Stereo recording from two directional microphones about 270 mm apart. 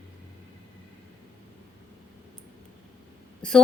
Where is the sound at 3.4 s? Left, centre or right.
Centre.